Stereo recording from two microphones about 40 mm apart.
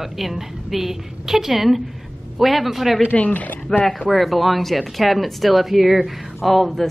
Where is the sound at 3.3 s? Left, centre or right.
Left.